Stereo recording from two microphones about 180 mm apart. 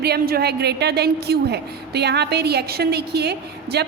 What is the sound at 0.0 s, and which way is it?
A woman's voice, 60° right (ahead or behind).